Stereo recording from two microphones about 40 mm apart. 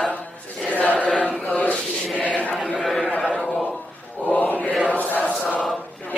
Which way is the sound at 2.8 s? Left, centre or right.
Centre.